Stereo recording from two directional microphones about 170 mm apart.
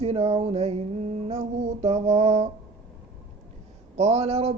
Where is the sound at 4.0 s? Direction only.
35° right (ahead or behind).